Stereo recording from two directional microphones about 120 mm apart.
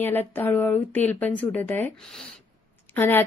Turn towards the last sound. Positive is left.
turn(degrees=20)  # may be behind; listen again after turning